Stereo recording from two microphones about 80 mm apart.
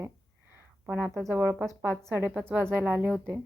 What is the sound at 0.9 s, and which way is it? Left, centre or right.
Speech, right.